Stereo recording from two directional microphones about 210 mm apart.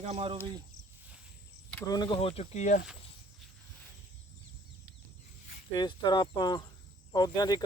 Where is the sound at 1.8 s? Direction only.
20° left (ahead or behind); by 2.8 s 35° left (ahead or behind).